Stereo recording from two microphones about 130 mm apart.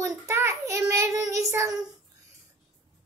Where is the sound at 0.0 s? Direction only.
20° right (ahead or behind).